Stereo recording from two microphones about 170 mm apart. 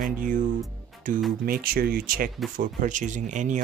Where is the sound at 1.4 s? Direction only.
60° right (ahead or behind).